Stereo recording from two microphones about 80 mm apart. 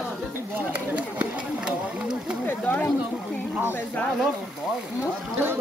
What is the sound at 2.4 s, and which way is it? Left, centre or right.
Speech, left.